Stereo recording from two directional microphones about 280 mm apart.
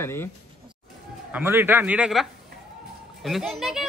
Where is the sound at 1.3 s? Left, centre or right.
Centre.